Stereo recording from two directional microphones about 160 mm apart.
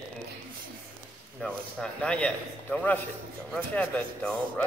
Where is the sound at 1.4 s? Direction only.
5° left (ahead or behind).